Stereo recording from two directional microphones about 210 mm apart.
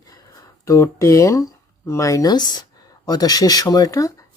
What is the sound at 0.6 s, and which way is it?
Speech, 15° left (ahead or behind).